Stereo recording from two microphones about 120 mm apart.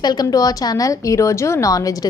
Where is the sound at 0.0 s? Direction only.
35° left (ahead or behind).